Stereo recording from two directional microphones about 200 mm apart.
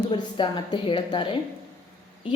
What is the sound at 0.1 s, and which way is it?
A woman's voice, 25° left (ahead or behind).